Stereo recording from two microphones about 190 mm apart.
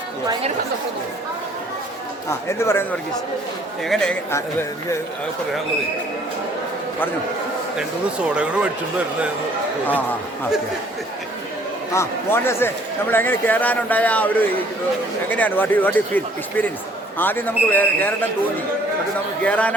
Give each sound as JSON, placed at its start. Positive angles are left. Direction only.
{"t": 2.5, "sound": "a man's voice", "side_deg": 15}
{"t": 3.8, "sound": "speech", "side_deg": 5}
{"t": 8.4, "sound": "a man's voice", "side_deg": -5}
{"t": 11.9, "sound": "a man's voice", "side_deg": 15}
{"t": 19.4, "sound": "a man's voice", "side_deg": 5}